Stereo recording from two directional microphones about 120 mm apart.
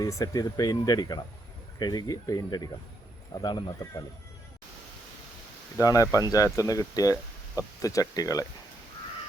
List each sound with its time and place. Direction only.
0.0 s speech: 30° left (ahead or behind)
5.8 s speech: 30° left (ahead or behind)